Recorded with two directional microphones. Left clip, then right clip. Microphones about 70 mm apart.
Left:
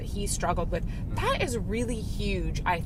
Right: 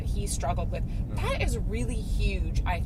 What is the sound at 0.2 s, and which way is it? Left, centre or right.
Speech, left.